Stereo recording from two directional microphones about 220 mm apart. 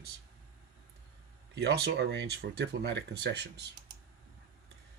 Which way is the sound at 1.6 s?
50° right (ahead or behind).